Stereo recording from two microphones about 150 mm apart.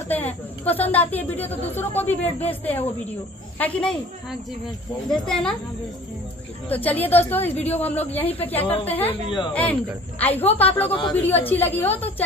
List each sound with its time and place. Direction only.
0.1 s a woman's voice: 10° left (ahead or behind)
5.1 s speech: 5° left (ahead or behind)
6.7 s a woman's voice: 10° left (ahead or behind)
9.1 s a woman's voice: 25° left (ahead or behind)
9.5 s a woman's voice: 10° left (ahead or behind)
10.9 s a woman's voice: 30° left (ahead or behind)
11.1 s a woman's voice: 10° left (ahead or behind)